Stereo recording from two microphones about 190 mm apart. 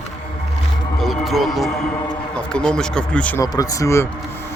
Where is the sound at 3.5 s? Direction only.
20° left (ahead or behind).